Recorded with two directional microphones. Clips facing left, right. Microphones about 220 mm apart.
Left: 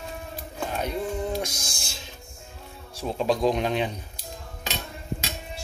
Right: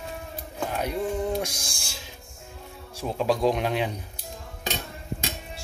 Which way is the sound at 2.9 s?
10° right (ahead or behind).